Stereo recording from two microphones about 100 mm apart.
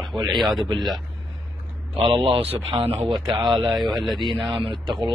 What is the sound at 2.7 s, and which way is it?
A man's voice, 45° right (ahead or behind).